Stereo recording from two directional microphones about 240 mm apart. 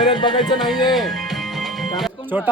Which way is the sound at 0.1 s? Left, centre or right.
Centre.